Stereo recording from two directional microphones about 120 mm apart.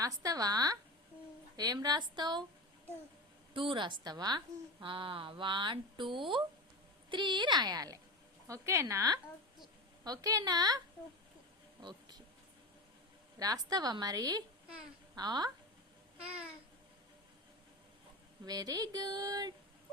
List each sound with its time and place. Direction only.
0.0 s speech: 30° right (ahead or behind)
3.5 s a woman's voice: 45° right (ahead or behind)
11.8 s a sound: 35° right (ahead or behind)
13.4 s speech: 30° right (ahead or behind)
16.2 s babbling: 10° right (ahead or behind)
18.4 s speech: 35° right (ahead or behind)